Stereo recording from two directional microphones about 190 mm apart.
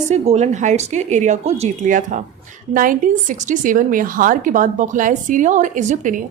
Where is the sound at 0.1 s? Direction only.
35° right (ahead or behind).